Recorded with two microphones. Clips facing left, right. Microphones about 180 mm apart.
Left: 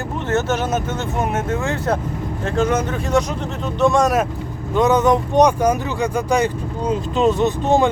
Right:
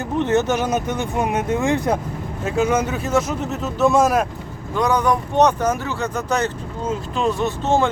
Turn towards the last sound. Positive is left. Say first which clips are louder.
# left 3 dB
turn(degrees=15)  # may be behind; listen again after turning